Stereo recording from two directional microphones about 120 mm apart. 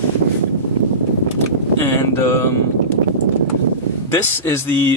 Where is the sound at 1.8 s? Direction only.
20° left (ahead or behind).